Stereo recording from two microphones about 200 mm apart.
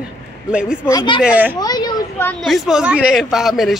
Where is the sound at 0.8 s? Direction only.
20° left (ahead or behind).